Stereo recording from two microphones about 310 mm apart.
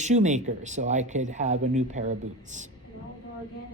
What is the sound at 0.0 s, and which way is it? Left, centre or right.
Speech, right.